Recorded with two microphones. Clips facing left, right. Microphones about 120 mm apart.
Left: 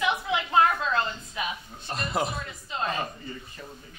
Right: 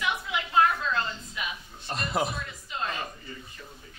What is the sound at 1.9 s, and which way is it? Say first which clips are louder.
Speech: even; centre (ahead or behind).